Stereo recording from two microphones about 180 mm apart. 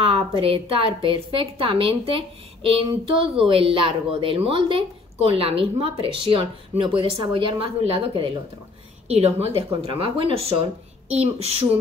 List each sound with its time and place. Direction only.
0.4 s a woman's voice: 30° right (ahead or behind)